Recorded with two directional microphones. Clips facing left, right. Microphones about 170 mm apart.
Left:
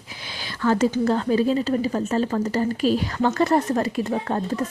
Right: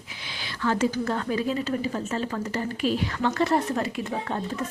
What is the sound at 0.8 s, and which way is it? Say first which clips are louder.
A woman's voice: left 6 dB; 25° left (ahead or behind).